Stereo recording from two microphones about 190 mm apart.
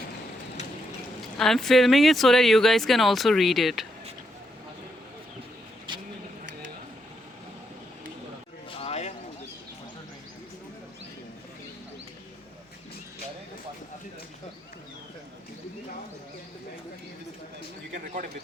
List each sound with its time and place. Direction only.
1.4 s speech: centre (ahead or behind)
5.9 s vehicle: 25° right (ahead or behind)
8.7 s a sound: 30° left (ahead or behind)